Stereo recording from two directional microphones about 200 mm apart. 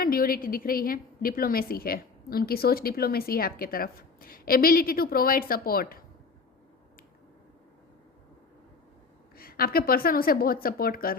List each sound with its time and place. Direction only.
0.0 s a woman's voice: 45° left (ahead or behind)
9.3 s a woman's voice: 50° left (ahead or behind)